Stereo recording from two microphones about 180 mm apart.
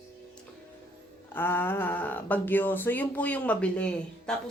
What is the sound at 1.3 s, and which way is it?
Speech, 10° left (ahead or behind).